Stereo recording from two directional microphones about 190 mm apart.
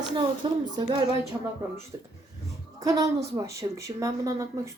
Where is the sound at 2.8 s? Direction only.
20° right (ahead or behind).